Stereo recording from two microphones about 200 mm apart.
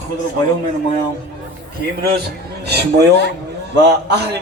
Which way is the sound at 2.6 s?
55° right (ahead or behind).